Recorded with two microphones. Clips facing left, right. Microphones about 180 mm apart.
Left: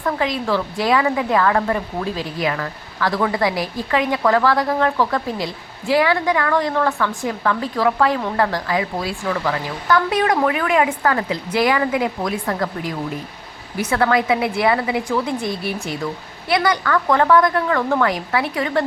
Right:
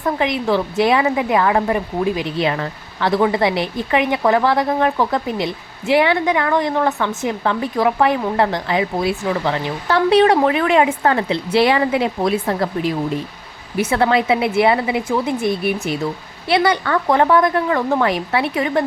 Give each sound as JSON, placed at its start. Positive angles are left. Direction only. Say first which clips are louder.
{"t": 0.0, "sound": "speech", "louder": "right 2 dB", "side_deg": -20}
{"t": 15.4, "sound": "speech", "louder": "right 5 dB", "side_deg": -60}
{"t": 16.5, "sound": "speech", "louder": "right 2 dB", "side_deg": -25}